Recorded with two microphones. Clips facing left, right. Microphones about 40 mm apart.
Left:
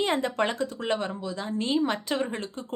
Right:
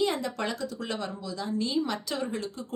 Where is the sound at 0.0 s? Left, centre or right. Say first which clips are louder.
Left 3 dB; left.